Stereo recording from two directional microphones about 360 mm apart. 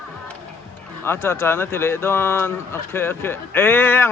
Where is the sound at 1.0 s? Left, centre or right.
Centre.